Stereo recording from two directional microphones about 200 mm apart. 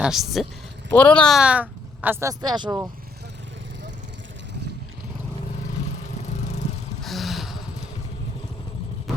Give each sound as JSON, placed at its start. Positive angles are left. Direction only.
{"t": 0.0, "sound": "speech", "side_deg": 0}
{"t": 2.4, "sound": "speech", "side_deg": -20}
{"t": 7.0, "sound": "gasp", "side_deg": 0}